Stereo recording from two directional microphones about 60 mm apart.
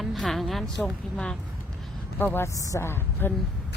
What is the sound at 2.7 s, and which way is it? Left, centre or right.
Speech, left.